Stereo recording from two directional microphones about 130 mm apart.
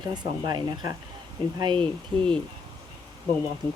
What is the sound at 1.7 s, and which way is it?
Speech, 10° left (ahead or behind).